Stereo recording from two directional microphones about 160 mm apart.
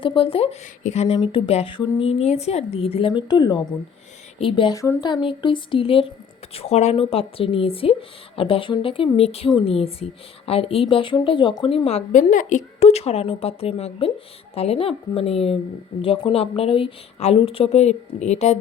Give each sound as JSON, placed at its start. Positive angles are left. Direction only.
{"t": 0.0, "sound": "a woman's voice", "side_deg": 35}